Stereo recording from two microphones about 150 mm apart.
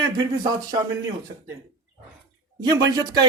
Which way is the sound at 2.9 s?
25° right (ahead or behind).